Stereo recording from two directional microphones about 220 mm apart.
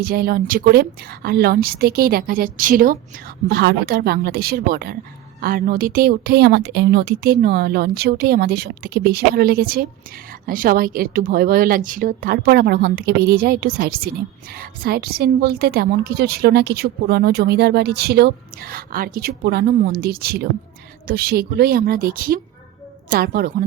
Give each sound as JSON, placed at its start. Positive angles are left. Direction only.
{"t": 0.0, "sound": "speech", "side_deg": -45}
{"t": 3.5, "sound": "speech", "side_deg": -50}